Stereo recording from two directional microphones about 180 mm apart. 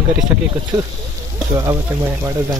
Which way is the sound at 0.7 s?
25° right (ahead or behind).